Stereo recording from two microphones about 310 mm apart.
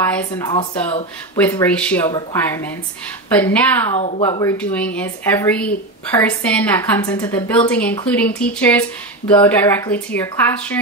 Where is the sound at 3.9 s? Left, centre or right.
Centre.